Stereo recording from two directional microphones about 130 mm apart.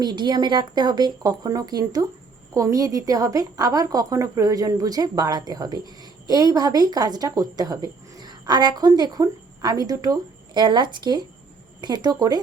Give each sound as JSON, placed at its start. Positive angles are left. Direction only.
{"t": 0.0, "sound": "a woman's voice", "side_deg": -35}